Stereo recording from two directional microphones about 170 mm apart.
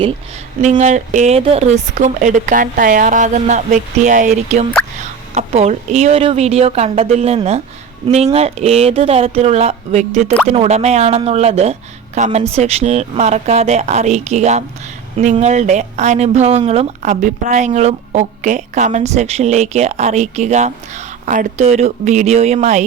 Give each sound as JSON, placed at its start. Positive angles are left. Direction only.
{"t": 0.6, "sound": "speech", "side_deg": -45}